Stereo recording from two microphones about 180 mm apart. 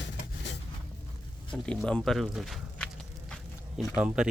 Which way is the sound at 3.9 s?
5° right (ahead or behind).